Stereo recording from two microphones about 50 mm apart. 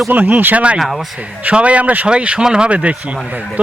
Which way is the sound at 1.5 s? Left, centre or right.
Right.